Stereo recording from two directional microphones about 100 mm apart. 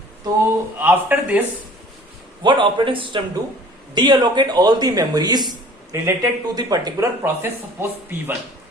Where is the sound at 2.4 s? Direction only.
55° right (ahead or behind).